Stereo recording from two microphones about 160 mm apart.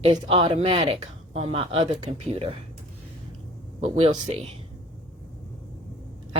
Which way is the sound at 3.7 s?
40° right (ahead or behind).